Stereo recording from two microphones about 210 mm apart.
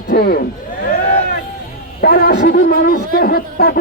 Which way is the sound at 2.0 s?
45° left (ahead or behind).